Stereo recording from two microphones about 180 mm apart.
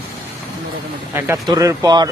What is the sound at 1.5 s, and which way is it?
Speech, 20° right (ahead or behind).